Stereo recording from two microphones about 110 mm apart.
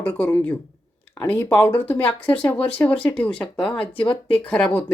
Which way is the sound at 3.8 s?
50° left (ahead or behind).